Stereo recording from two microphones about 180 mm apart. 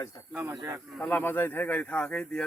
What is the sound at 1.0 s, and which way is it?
Speech, 10° left (ahead or behind).